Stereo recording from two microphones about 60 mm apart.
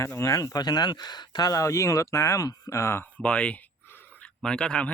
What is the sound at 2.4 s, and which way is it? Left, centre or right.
Speech, left.